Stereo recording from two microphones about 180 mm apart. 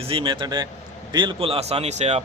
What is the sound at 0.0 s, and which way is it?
A man's voice, 30° right (ahead or behind).